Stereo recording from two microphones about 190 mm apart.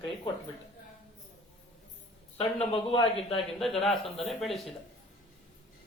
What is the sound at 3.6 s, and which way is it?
Speech, centre (ahead or behind).